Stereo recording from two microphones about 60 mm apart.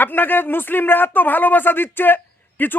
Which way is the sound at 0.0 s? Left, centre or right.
Left.